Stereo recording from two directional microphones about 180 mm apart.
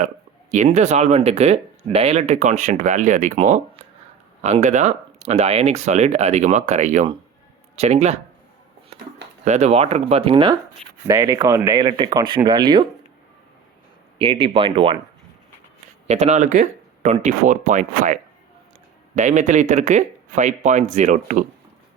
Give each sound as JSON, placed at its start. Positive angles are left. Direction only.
{"t": 0.5, "sound": "speech", "side_deg": -40}
{"t": 8.9, "sound": "a sound", "side_deg": -35}
{"t": 9.4, "sound": "speech", "side_deg": -40}
{"t": 14.2, "sound": "speech", "side_deg": -30}
{"t": 16.0, "sound": "speech", "side_deg": -40}